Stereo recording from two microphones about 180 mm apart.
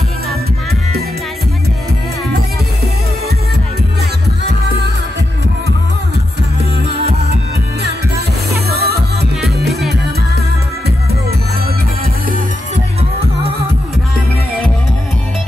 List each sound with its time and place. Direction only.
8.6 s music: 60° right (ahead or behind)